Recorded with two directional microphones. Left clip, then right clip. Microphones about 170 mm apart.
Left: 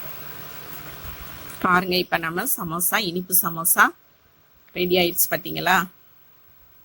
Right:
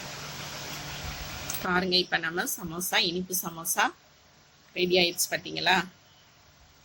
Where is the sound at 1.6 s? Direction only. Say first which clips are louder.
Left 6 dB; 45° left (ahead or behind).